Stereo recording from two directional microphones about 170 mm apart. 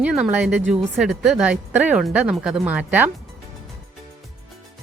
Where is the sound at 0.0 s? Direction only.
5° right (ahead or behind).